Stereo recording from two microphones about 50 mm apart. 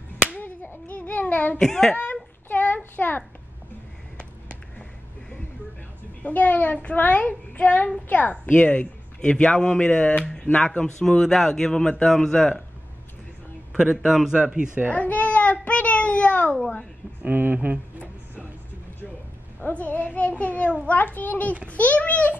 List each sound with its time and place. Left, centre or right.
0.3 s clapping: left
1.3 s a sound: left
1.6 s speech: centre
2.8 s a sound: left
4.2 s a sound: left
6.2 s a woman's voice: left
10.8 s speech: centre
13.7 s a man's voice: centre
14.3 s speech: right
15.0 s a sound: left
17.2 s speech: right
19.7 s a child's voice: left